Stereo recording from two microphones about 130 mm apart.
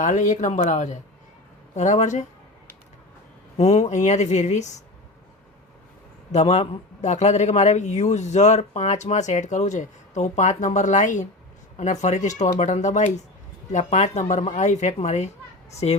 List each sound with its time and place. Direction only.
0.0 s a woman's voice: 75° left (ahead or behind)
3.6 s a man's voice: 60° left (ahead or behind)
6.3 s a man's voice: 55° left (ahead or behind)